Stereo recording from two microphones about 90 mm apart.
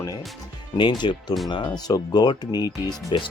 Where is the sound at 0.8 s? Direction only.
60° left (ahead or behind).